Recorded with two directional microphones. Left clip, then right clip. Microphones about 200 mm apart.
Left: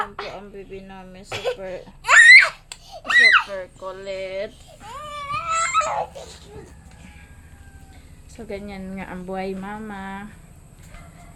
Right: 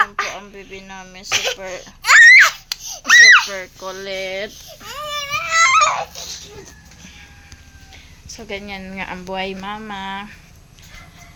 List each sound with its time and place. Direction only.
0.0 s cough: centre (ahead or behind)
3.4 s speech: 25° right (ahead or behind)
5.1 s a sound: 5° right (ahead or behind)
8.4 s speech: 5° left (ahead or behind)